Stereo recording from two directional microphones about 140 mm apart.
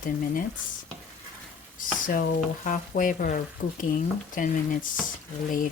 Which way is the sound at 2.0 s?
85° left.